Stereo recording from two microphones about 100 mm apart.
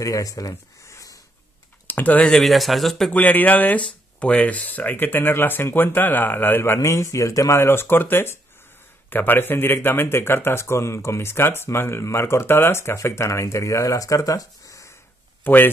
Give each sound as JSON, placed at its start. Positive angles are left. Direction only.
{"t": 0.0, "sound": "a sound", "side_deg": 35}
{"t": 1.9, "sound": "speech", "side_deg": 15}
{"t": 2.4, "sound": "speech", "side_deg": 0}
{"t": 3.1, "sound": "speech", "side_deg": 15}
{"t": 15.4, "sound": "speech", "side_deg": 20}